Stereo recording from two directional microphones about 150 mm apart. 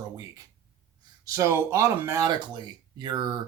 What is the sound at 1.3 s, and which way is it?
Speech, 20° right (ahead or behind).